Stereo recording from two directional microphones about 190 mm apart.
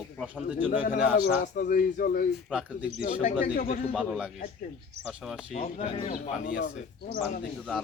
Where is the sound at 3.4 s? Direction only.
50° left (ahead or behind).